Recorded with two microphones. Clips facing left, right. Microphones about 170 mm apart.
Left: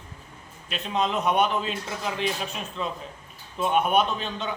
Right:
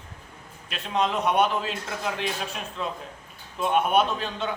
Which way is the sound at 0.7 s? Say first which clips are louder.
Even; centre (ahead or behind).